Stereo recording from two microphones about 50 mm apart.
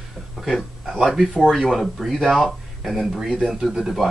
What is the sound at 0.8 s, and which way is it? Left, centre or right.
Speech, centre.